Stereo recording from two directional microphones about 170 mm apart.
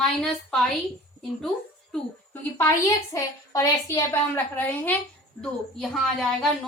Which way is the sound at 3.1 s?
20° left (ahead or behind).